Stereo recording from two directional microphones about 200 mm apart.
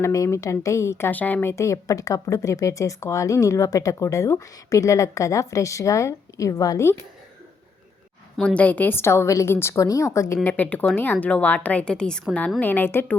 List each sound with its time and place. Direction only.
0.0 s speech: 15° left (ahead or behind)
8.4 s speech: 5° left (ahead or behind)